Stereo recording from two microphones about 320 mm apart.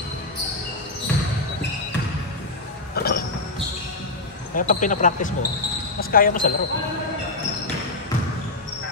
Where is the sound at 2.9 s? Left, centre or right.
Left.